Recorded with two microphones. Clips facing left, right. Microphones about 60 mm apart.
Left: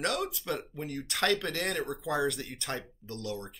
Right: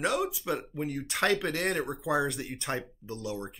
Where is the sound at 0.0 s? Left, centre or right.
Centre.